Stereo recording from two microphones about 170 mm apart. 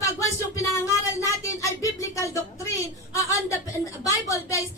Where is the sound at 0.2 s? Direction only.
20° left (ahead or behind).